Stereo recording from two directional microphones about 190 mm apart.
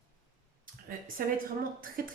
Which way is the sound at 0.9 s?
50° right (ahead or behind).